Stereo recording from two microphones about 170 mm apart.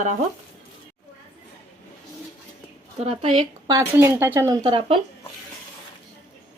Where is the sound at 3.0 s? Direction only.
35° right (ahead or behind).